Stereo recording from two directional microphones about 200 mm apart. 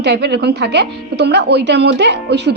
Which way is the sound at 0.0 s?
55° right (ahead or behind).